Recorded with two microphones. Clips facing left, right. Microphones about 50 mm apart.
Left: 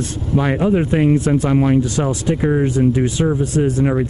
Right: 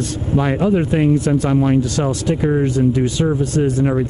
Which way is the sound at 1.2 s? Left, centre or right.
Centre.